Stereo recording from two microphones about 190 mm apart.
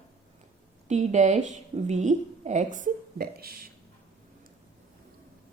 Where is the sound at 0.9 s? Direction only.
40° right (ahead or behind).